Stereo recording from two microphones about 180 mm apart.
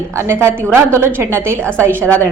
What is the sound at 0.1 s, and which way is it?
A woman's voice, 15° right (ahead or behind).